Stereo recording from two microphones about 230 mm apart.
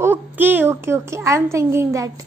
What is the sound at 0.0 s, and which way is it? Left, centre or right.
A child's voice, centre.